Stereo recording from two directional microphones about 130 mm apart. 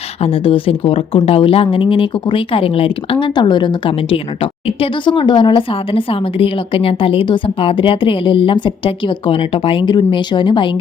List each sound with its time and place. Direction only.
0.2 s a woman's voice: 45° left (ahead or behind)